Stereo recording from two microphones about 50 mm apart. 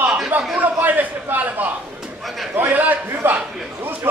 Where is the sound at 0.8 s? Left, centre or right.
Right.